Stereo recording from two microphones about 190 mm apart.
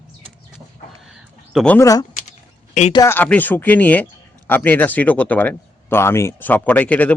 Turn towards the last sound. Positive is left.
turn(degrees=10)  # may be behind; listen again after turning